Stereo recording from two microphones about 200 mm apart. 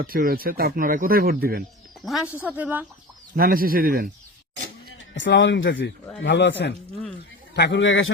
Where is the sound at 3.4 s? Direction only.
45° right (ahead or behind).